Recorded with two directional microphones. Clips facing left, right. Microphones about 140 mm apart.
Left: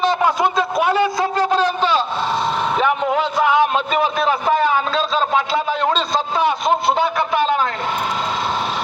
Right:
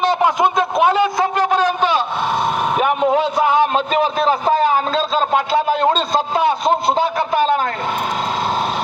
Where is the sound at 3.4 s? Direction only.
40° right (ahead or behind).